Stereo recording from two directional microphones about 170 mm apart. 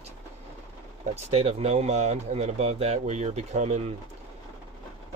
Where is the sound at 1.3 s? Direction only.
40° right (ahead or behind).